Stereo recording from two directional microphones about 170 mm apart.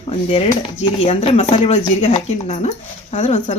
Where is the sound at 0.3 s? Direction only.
35° left (ahead or behind).